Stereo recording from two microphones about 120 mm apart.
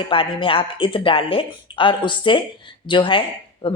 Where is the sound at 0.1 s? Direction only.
45° left (ahead or behind).